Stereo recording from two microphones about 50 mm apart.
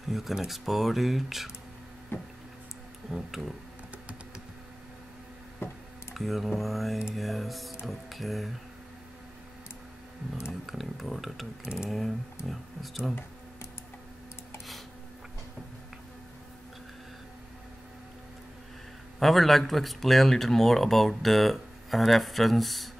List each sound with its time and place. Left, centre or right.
0.1 s speech: centre
2.1 s a sound: left
3.1 s speech: centre
5.6 s music: left
6.1 s speech: centre
10.7 s speech: centre
12.4 s speech: centre
19.1 s speech: centre